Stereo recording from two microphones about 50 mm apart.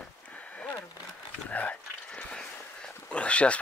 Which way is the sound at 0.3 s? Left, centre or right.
Left.